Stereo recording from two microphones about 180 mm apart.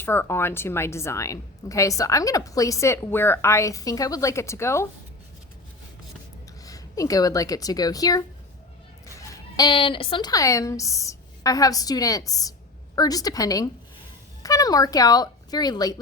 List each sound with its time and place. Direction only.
0.0 s a woman's voice: 10° left (ahead or behind)
6.7 s a woman's voice: 20° left (ahead or behind)